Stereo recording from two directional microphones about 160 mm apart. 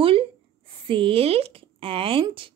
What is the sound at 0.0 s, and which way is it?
A woman's voice, 35° right (ahead or behind).